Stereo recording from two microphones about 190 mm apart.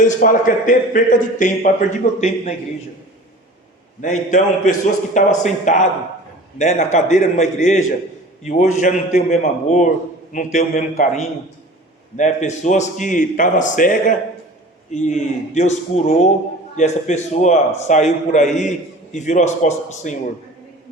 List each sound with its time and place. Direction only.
0.0 s a man's voice: 40° left (ahead or behind)
4.0 s a man's voice: 40° left (ahead or behind)